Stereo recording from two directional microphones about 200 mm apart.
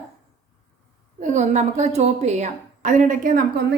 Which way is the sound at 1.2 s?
35° right (ahead or behind).